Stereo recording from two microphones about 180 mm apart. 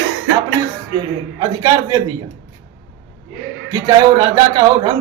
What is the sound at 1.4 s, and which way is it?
Speech, 20° right (ahead or behind).